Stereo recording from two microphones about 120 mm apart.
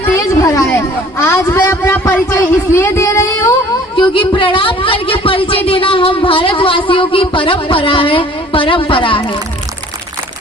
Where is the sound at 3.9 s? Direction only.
45° left (ahead or behind).